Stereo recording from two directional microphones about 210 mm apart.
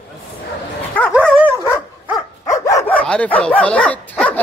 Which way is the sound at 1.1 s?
5° right (ahead or behind).